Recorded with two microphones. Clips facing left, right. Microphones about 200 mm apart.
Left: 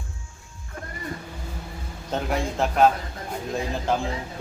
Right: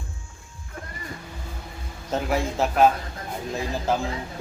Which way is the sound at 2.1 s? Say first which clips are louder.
Right 1 dB; centre (ahead or behind).